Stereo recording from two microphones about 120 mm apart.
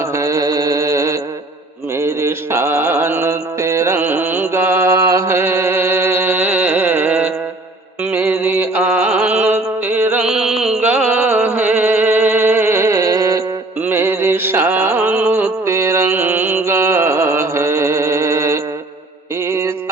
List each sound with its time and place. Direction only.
0.0 s music: 25° right (ahead or behind)
10.2 s music: 5° right (ahead or behind); by 18.6 s 25° right (ahead or behind)
19.5 s a sound: 20° right (ahead or behind)